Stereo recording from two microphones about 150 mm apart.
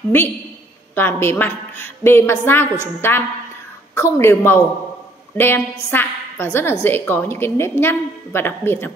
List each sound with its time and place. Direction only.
0.9 s a woman's voice: 15° left (ahead or behind)